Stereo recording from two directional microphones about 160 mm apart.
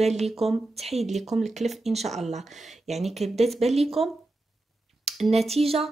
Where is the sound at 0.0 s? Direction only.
45° right (ahead or behind).